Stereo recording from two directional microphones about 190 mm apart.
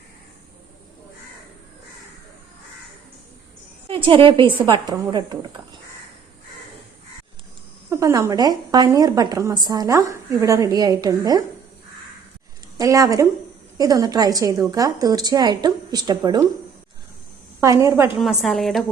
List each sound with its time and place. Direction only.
3.8 s a woman's voice: 30° right (ahead or behind)
7.9 s a woman's voice: 15° right (ahead or behind)
12.7 s a woman's voice: 20° right (ahead or behind)
17.6 s a woman's voice: 15° right (ahead or behind)
18.2 s a woman's voice: centre (ahead or behind)